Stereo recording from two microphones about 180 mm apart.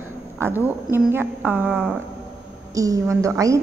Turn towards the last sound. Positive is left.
turn(degrees=-15)  # may be behind; listen again after turning